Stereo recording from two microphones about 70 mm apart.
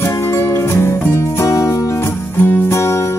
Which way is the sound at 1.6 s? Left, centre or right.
Left.